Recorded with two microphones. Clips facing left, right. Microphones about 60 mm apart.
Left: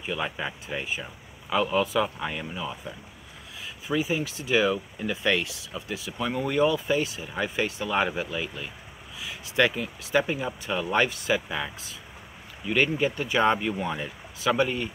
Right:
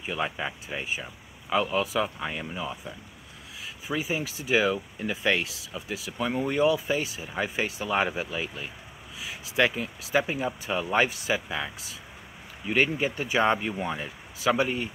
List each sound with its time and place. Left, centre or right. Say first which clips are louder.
0.1 s speech: even; centre